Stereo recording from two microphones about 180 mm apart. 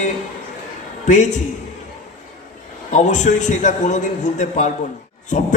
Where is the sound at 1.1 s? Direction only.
45° left (ahead or behind).